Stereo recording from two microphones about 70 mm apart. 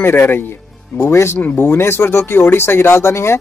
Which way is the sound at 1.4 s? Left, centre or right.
Left.